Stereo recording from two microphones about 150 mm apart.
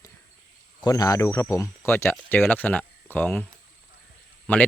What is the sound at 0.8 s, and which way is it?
Speech, 25° left (ahead or behind).